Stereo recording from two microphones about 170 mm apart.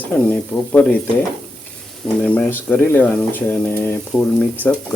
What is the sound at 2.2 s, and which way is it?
Speech, 10° left (ahead or behind).